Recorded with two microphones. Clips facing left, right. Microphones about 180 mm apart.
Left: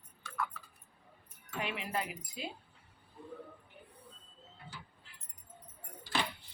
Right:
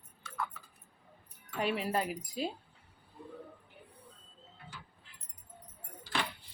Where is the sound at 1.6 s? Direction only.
35° right (ahead or behind).